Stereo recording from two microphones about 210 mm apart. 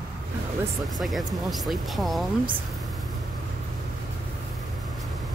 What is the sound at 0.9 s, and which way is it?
Speech, centre (ahead or behind).